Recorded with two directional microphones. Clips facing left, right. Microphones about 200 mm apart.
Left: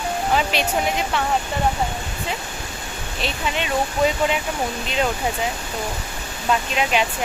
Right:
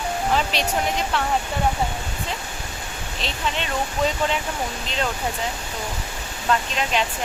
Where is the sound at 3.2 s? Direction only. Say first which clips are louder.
Left 2 dB; 10° left (ahead or behind).